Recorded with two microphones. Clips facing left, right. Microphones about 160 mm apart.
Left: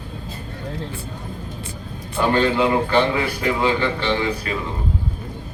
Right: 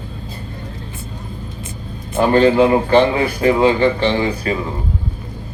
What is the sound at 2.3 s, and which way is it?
Speech, 45° right (ahead or behind).